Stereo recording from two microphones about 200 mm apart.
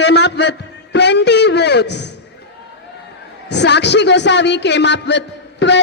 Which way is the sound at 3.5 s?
60° left (ahead or behind).